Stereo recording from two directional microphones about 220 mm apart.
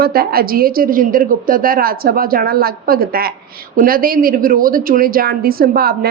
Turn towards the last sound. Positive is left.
turn(degrees=-45)  # may be behind; listen again after turning